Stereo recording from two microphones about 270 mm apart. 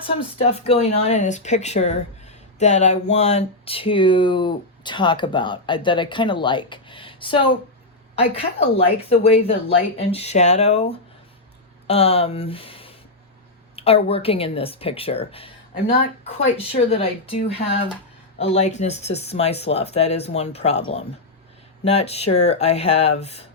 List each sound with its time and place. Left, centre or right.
0.0 s speech: left
11.9 s speech: left